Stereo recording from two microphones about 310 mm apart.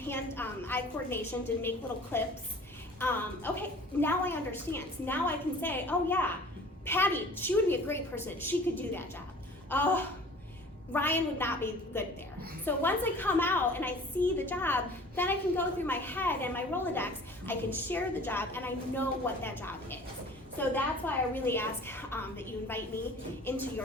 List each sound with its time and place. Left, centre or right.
0.1 s a woman's voice: centre
9.6 s a woman's voice: centre